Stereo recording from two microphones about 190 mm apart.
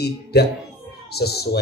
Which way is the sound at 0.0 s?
60° left (ahead or behind).